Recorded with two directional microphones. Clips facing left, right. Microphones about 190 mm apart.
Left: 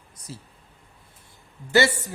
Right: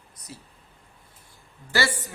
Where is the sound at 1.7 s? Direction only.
20° left (ahead or behind).